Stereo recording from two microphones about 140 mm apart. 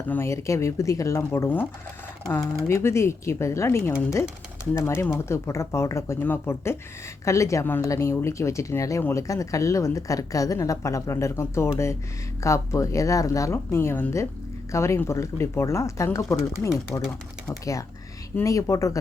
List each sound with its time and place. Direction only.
0.1 s speech: 20° left (ahead or behind)
2.6 s speech: 20° left (ahead or behind)